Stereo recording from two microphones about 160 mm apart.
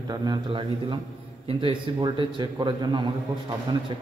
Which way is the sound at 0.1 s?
25° right (ahead or behind).